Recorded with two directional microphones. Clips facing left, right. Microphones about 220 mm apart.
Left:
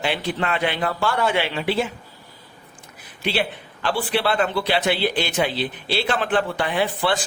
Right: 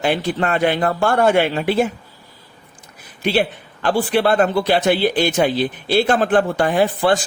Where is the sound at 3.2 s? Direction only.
45° right (ahead or behind).